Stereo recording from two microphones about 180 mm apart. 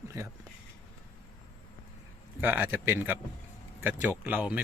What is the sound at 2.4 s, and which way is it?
Speech, 10° right (ahead or behind).